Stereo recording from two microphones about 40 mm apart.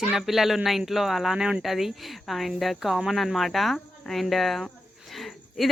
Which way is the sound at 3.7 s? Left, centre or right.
Centre.